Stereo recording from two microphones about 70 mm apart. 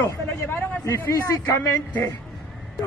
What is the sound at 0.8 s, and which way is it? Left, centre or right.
Speech, left.